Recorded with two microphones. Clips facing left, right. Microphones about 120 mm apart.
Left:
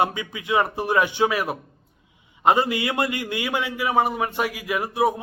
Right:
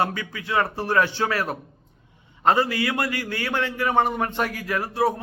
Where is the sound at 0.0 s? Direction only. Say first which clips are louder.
Left 2 dB; 20° left (ahead or behind).